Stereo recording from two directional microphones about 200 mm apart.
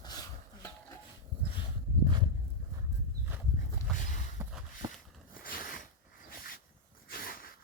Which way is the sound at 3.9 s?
Centre (ahead or behind).